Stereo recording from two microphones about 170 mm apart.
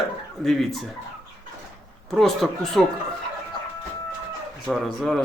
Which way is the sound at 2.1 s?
Centre (ahead or behind).